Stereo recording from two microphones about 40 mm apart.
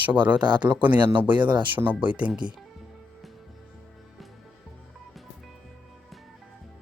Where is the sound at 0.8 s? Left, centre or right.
Right.